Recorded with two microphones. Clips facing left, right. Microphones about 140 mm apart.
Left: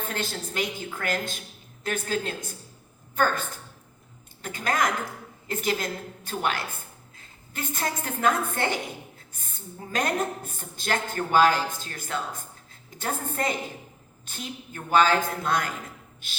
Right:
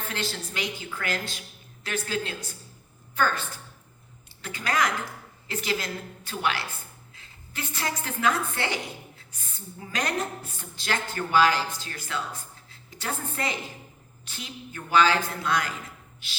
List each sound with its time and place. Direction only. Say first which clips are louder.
0.1 s a woman's voice: left 1 dB; 50° left (ahead or behind)
4.4 s a woman's voice: left 1 dB; 50° left (ahead or behind)